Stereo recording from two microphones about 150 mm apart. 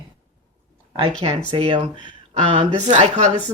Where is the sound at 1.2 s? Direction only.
40° right (ahead or behind).